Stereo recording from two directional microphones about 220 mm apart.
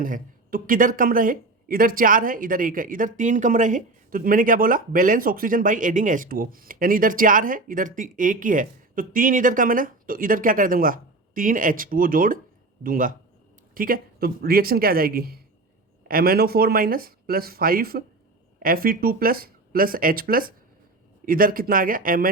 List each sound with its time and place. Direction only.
0.0 s speech: 40° right (ahead or behind)